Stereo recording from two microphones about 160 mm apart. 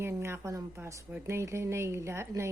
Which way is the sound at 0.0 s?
15° right (ahead or behind).